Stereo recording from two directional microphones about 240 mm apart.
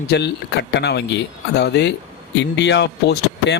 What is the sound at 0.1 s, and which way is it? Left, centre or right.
Speech, left.